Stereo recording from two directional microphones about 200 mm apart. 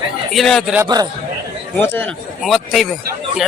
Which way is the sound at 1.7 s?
10° left (ahead or behind).